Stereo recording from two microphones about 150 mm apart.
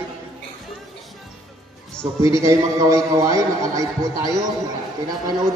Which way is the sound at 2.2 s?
20° right (ahead or behind).